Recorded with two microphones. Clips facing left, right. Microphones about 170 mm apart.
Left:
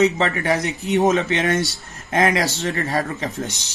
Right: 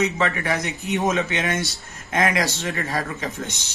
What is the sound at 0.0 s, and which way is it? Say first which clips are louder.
Speech: left 4 dB; 35° left (ahead or behind).